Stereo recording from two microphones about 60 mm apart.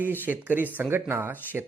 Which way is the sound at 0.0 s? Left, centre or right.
Right.